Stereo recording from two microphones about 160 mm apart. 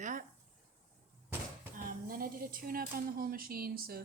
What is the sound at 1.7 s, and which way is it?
Speech, 60° right (ahead or behind).